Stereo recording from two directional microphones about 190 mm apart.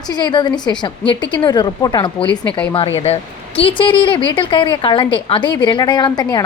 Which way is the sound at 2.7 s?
30° left (ahead or behind).